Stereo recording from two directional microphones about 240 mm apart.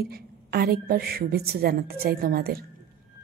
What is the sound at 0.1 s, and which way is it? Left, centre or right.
A woman's voice, right.